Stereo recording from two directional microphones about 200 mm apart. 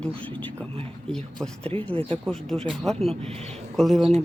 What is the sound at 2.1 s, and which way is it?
Speech, centre (ahead or behind).